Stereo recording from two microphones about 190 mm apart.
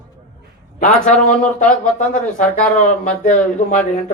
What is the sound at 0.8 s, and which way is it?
Speech, 40° left (ahead or behind).